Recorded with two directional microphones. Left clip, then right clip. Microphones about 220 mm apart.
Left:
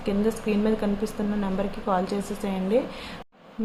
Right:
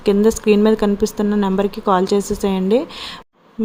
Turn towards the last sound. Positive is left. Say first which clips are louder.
# right 7 dB
turn(degrees=-45)  # may be behind; listen again after turning